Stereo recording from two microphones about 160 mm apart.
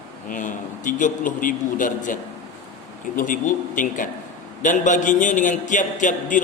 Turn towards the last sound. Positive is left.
turn(degrees=55)  # may be behind; listen again after turning